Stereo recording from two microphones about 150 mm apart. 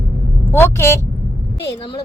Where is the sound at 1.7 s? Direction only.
35° left (ahead or behind).